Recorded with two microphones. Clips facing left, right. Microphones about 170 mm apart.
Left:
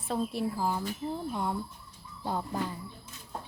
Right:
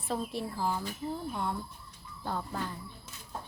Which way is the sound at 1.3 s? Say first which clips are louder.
Left 2 dB; 10° left (ahead or behind).